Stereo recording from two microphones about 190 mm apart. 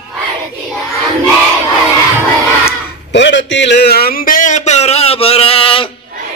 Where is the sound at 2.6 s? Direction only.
70° left (ahead or behind); by 5.9 s 30° left (ahead or behind).